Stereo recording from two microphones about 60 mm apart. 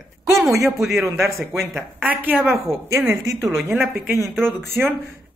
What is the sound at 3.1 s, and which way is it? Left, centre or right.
Speech, right.